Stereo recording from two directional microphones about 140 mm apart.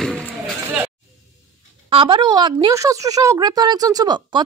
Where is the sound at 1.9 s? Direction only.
35° right (ahead or behind).